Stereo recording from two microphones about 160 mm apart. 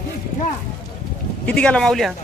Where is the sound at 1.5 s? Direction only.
5° left (ahead or behind).